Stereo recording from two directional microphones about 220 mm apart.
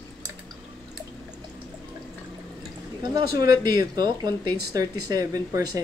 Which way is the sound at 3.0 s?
15° right (ahead or behind).